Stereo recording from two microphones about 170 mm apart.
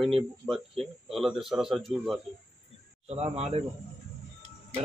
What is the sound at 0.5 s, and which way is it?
Speech, centre (ahead or behind).